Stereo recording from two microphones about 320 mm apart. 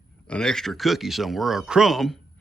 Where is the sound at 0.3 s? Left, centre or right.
Centre.